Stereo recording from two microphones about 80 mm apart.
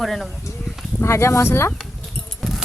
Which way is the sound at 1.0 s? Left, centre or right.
Left.